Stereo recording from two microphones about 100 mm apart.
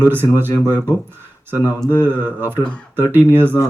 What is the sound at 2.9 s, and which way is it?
Speech, 20° right (ahead or behind).